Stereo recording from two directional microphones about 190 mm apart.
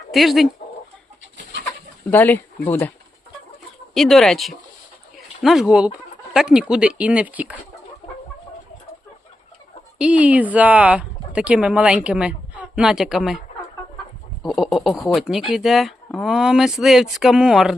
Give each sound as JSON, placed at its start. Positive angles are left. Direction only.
{"t": 0.1, "sound": "speech", "side_deg": 0}
{"t": 1.2, "sound": "bird", "side_deg": -75}
{"t": 2.0, "sound": "speech", "side_deg": 10}
{"t": 3.9, "sound": "speech", "side_deg": 0}
{"t": 10.0, "sound": "speech", "side_deg": -5}
{"t": 14.4, "sound": "speech", "side_deg": 0}